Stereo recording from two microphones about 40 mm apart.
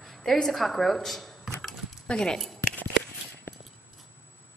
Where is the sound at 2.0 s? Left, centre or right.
Centre.